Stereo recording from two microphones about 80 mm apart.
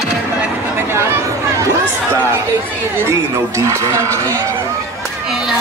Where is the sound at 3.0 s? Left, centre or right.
Right.